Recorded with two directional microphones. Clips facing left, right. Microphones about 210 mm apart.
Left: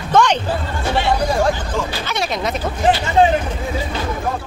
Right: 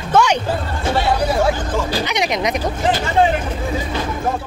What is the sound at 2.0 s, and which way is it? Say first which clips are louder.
Speech: right 2 dB; 15° right (ahead or behind).